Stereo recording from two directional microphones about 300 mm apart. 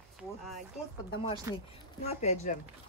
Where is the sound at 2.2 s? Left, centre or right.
Left.